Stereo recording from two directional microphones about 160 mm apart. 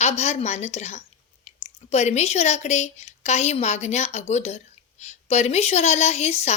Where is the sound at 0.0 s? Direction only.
45° left (ahead or behind).